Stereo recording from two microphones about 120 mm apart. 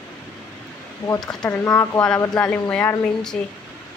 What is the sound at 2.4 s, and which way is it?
Speech, 10° left (ahead or behind).